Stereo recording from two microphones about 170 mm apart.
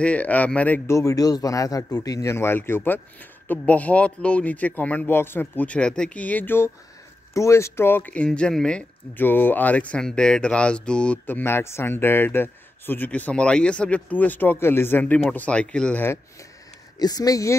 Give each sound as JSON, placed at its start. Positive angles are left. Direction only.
{"t": 0.0, "sound": "speech", "side_deg": 10}
{"t": 17.0, "sound": "speech", "side_deg": 20}